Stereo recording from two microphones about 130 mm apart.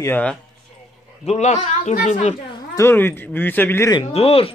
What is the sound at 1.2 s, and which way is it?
A man's voice, 55° left (ahead or behind).